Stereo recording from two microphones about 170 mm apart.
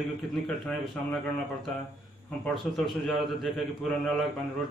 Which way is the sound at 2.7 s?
5° left (ahead or behind).